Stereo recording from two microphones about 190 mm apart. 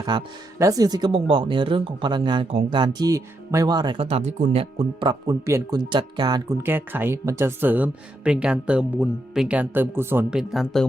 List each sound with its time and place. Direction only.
0.0 s speech: 20° right (ahead or behind); by 10.8 s centre (ahead or behind)